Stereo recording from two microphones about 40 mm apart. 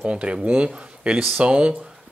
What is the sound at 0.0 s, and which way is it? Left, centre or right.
Speech, right.